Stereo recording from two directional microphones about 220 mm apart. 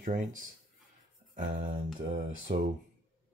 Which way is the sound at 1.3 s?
40° right (ahead or behind).